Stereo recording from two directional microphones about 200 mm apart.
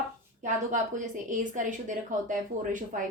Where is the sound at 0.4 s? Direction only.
40° right (ahead or behind).